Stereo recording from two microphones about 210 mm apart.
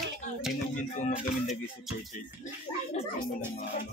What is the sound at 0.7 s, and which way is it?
Speech, 35° left (ahead or behind).